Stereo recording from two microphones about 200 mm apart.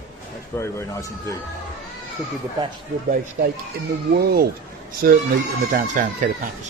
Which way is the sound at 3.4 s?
45° right (ahead or behind).